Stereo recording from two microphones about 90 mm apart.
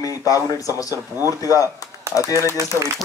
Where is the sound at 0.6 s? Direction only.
40° left (ahead or behind).